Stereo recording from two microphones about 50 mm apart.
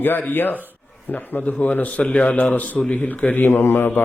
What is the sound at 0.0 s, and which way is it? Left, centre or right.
Speech, left.